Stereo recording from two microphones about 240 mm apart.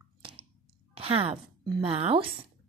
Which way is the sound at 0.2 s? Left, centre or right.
Right.